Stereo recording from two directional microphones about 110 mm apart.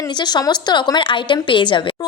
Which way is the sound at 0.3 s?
40° left (ahead or behind).